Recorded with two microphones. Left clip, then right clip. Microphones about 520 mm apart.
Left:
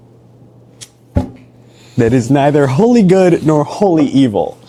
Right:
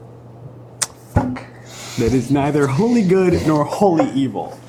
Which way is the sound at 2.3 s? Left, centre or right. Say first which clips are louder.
Left 6 dB; left.